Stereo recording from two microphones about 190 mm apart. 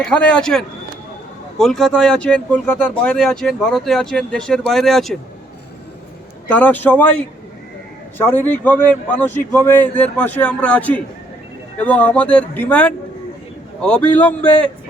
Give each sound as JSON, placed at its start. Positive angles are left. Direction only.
{"t": 0.0, "sound": "speech", "side_deg": 5}
{"t": 6.5, "sound": "a man's voice", "side_deg": 10}